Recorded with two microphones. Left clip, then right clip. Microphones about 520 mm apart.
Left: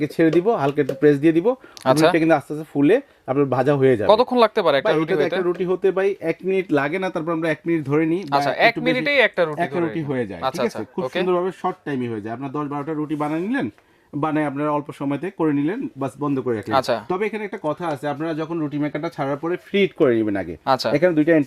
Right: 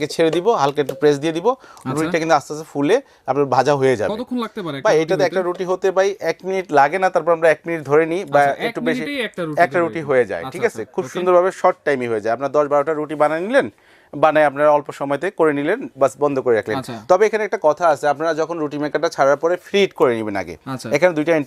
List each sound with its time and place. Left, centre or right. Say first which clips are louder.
0.0 s speech: right 1 dB; right
1.8 s speech: left 7 dB; left
2.1 s speech: right 1 dB; right
4.1 s speech: left 11 dB; left
4.9 s speech: right 3 dB; right
8.3 s speech: left 2 dB; left
9.6 s speech: right 7 dB; right
11.3 s speech: right 13 dB; right
19.7 s speech: even; right
20.7 s speech: left 11 dB; left
20.9 s speech: right 4 dB; right